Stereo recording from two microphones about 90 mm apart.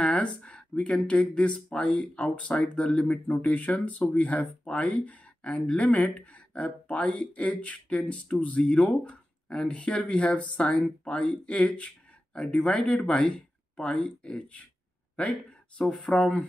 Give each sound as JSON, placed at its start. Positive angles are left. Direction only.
{"t": 0.0, "sound": "speech", "side_deg": 15}
{"t": 15.8, "sound": "speech", "side_deg": 5}